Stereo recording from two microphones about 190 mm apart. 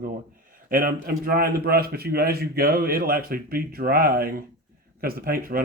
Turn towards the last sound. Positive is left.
turn(degrees=-50)  # may be behind; listen again after turning